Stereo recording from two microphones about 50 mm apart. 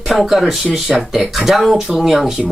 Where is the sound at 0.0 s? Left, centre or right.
Centre.